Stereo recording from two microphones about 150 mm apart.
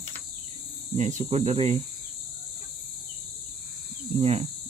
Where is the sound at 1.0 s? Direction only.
50° right (ahead or behind).